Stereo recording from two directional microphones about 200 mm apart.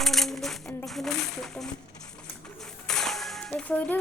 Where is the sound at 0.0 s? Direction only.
Centre (ahead or behind).